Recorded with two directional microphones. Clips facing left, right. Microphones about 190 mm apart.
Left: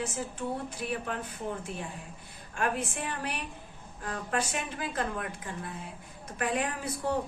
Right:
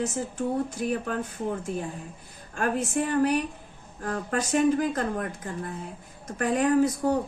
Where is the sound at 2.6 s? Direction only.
45° right (ahead or behind).